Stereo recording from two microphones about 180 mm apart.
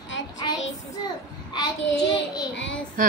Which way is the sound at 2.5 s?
90° left.